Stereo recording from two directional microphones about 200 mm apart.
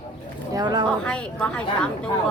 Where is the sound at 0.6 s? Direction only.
20° right (ahead or behind).